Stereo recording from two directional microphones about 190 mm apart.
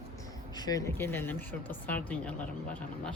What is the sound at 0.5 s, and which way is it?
Speech, 20° left (ahead or behind).